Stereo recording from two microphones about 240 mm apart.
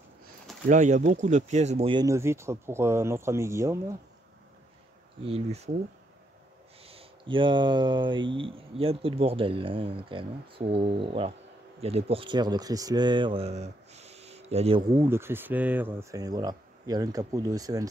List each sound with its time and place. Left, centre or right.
0.7 s speech: right; by 3.8 s centre
5.2 s speech: right
6.8 s speech: right
14.9 s speech: centre